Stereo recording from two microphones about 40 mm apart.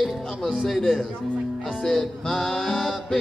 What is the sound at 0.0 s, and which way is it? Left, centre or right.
Speech, centre.